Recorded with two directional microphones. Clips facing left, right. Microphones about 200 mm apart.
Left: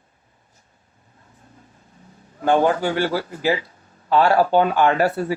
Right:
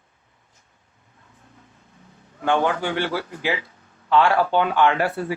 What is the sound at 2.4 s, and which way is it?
Speech, 40° left (ahead or behind).